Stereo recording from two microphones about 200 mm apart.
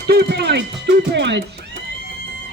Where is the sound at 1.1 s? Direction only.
60° right (ahead or behind).